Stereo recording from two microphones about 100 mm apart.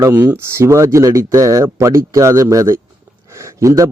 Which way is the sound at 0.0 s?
25° right (ahead or behind).